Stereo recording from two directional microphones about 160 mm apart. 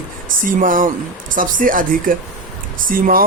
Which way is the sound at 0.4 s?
60° right (ahead or behind).